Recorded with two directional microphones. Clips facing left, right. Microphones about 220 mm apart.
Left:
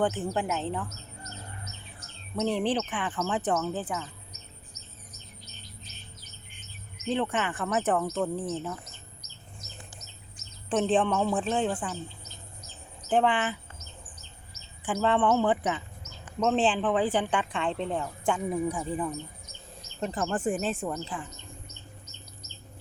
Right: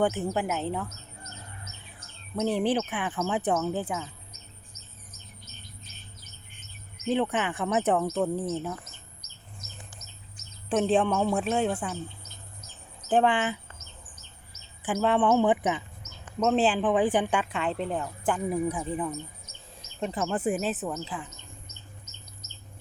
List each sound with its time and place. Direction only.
0.0 s speech: 10° right (ahead or behind)
2.3 s speech: 5° right (ahead or behind)
7.1 s speech: 15° right (ahead or behind)
9.6 s bird: 50° right (ahead or behind)
10.7 s speech: 10° right (ahead or behind)
13.1 s speech: 10° right (ahead or behind)
14.8 s speech: 10° right (ahead or behind)